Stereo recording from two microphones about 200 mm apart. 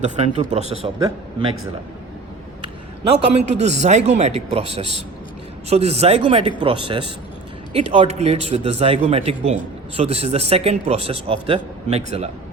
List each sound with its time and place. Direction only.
0.0 s a man's voice: 35° right (ahead or behind)
0.9 s a man's voice: 20° right (ahead or behind)
3.2 s a man's voice: 30° right (ahead or behind)